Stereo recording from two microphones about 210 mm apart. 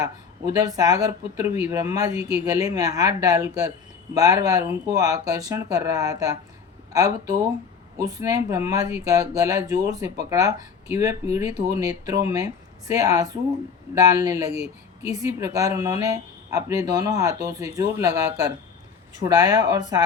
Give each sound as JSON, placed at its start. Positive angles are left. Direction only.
{"t": 0.5, "sound": "speech", "side_deg": -15}
{"t": 7.9, "sound": "speech", "side_deg": -15}